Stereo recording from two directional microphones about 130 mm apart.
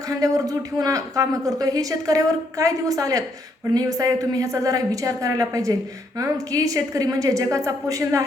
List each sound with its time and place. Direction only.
0.2 s speech: 25° right (ahead or behind)